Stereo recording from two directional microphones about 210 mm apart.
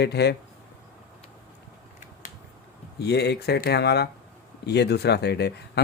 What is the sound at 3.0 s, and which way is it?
Speech, 50° left (ahead or behind).